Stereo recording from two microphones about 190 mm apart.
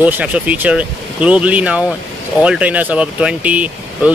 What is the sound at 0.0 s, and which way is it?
Speech, 10° right (ahead or behind).